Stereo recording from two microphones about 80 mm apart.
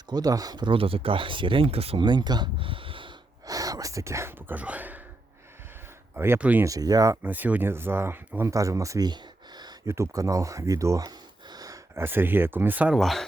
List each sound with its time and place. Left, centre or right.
0.1 s speech: right
3.4 s a sound: right; by 4.9 s centre
6.1 s speech: right
6.4 s speech: right
6.7 s speech: right
7.2 s speech: right
8.4 s speech: right
9.0 s a sound: right
9.8 s speech: right
11.4 s a sound: right
11.9 s speech: right
12.9 s speech: centre